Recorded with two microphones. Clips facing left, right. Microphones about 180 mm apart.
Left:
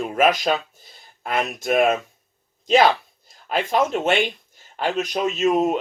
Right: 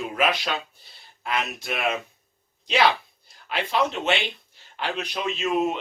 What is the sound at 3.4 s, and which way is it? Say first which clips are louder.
Speech: left 4 dB; 45° left (ahead or behind).